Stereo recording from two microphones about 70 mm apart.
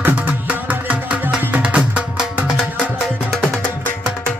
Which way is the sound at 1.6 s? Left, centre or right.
Centre.